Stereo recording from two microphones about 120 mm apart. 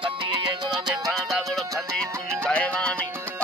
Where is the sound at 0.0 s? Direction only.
40° right (ahead or behind).